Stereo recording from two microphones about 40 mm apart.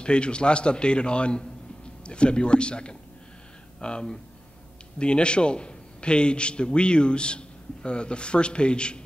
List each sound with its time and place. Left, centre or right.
0.0 s a man's voice: left